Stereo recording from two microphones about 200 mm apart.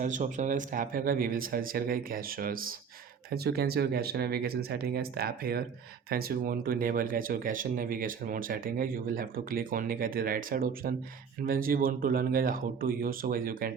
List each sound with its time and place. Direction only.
0.0 s speech: 40° right (ahead or behind)